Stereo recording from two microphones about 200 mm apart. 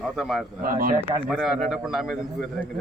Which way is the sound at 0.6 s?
45° right (ahead or behind).